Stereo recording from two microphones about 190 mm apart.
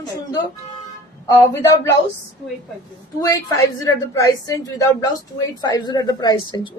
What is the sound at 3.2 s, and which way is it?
A woman's voice, 20° left (ahead or behind).